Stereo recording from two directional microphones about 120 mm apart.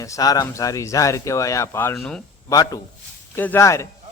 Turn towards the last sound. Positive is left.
turn(degrees=25)  # may be behind; listen again after turning